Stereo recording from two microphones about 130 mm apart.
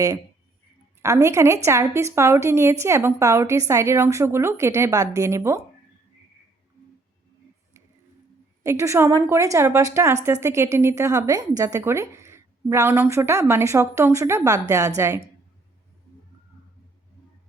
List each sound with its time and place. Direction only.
1.0 s a woman's voice: 25° right (ahead or behind)
8.6 s a woman's voice: 20° right (ahead or behind)